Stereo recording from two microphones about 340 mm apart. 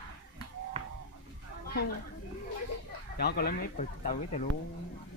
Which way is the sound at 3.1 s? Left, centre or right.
Left.